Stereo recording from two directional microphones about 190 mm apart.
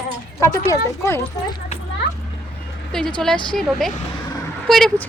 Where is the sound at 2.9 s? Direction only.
5° left (ahead or behind).